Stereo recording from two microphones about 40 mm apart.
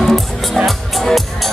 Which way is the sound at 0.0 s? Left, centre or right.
Centre.